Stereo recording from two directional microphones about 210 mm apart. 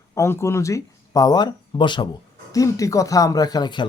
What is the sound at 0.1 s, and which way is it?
A man's voice, 15° left (ahead or behind).